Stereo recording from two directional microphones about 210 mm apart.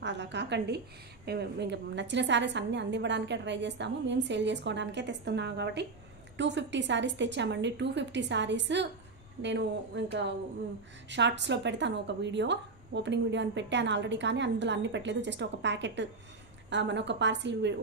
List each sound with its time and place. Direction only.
0.0 s a sound: 55° right (ahead or behind)
1.2 s a woman's voice: 50° right (ahead or behind)
11.1 s a woman's voice: 55° right (ahead or behind)